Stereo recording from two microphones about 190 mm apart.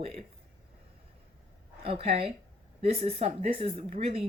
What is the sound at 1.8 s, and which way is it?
Speech, 30° right (ahead or behind).